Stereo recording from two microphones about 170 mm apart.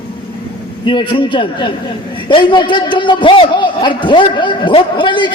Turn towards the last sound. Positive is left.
turn(degrees=30)  # may be behind; listen again after turning